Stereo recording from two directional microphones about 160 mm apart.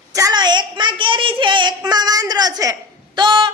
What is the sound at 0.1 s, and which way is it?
A woman's voice, 20° right (ahead or behind).